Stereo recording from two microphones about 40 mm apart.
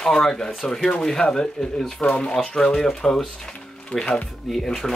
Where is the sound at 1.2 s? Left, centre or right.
Left.